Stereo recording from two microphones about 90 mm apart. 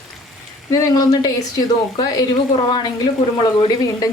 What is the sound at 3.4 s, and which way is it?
Speech, 45° left (ahead or behind).